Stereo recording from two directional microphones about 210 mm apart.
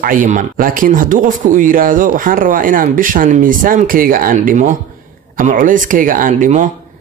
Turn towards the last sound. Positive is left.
turn(degrees=-35)  # may be behind; listen again after turning